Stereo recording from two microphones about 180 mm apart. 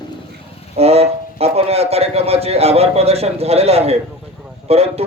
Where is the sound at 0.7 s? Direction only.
35° right (ahead or behind).